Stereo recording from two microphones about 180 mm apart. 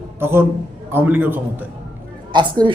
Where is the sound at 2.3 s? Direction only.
25° right (ahead or behind).